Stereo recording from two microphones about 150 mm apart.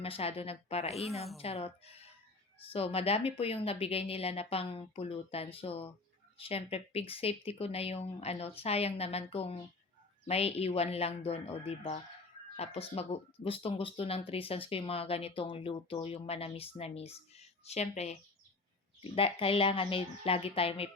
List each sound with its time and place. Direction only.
0.0 s speech: 40° left (ahead or behind)